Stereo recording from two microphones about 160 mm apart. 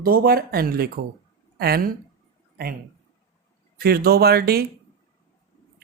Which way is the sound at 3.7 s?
75° right (ahead or behind).